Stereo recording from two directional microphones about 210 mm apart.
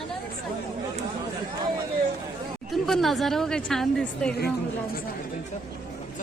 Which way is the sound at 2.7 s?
Centre (ahead or behind).